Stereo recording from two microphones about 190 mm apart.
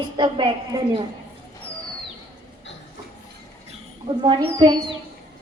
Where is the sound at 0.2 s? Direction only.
25° right (ahead or behind).